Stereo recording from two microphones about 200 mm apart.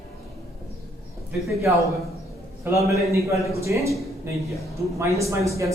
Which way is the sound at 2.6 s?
15° right (ahead or behind).